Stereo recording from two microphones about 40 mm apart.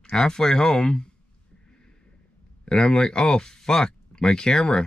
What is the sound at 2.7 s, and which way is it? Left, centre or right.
Speech, centre.